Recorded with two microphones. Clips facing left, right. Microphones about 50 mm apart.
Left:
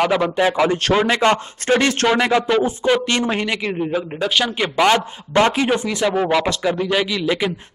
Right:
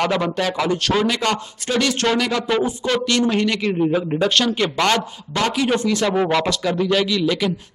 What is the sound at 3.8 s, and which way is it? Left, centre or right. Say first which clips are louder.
Speech: right 3 dB; centre.